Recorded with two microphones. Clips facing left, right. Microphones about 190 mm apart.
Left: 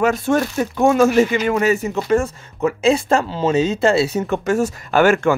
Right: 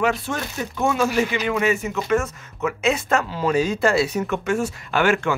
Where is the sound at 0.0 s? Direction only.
45° left (ahead or behind); by 4.4 s 25° left (ahead or behind).